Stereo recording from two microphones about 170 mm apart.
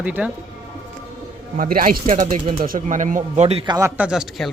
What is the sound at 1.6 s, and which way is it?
A man's voice, 55° right (ahead or behind).